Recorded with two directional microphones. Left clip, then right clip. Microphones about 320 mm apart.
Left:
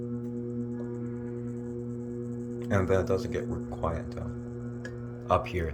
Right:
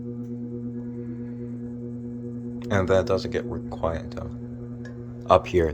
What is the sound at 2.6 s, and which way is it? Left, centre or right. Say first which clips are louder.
Speech: right 5 dB; centre.